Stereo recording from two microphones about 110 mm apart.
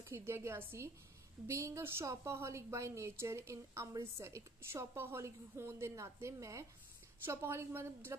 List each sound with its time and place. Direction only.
0.0 s a woman's voice: 20° right (ahead or behind)